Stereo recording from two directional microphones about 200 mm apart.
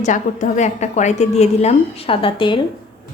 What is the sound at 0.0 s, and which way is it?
A woman's voice, 40° left (ahead or behind).